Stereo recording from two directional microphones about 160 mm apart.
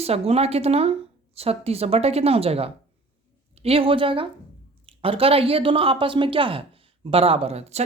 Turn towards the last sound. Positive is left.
turn(degrees=-40)  # may be behind; listen again after turning